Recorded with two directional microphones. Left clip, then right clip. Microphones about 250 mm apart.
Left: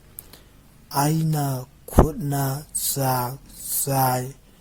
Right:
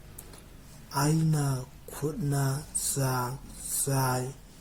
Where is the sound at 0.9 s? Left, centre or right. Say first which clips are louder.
Left 6 dB; left.